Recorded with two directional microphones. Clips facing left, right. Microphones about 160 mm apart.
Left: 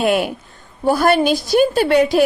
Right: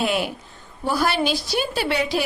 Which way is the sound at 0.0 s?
55° left (ahead or behind).